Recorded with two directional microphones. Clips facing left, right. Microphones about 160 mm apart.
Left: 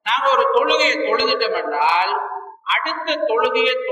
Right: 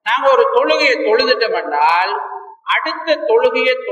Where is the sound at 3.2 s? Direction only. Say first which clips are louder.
Right 5 dB; centre (ahead or behind).